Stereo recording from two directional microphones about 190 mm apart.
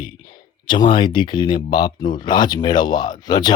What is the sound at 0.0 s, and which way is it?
Speech, 25° left (ahead or behind).